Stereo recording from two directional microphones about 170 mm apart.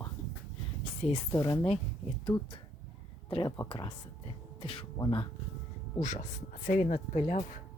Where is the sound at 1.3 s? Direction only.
20° left (ahead or behind).